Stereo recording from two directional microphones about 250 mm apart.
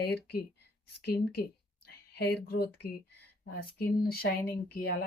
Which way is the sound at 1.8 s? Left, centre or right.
Left.